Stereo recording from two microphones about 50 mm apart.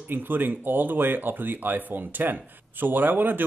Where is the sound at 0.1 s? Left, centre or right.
Right.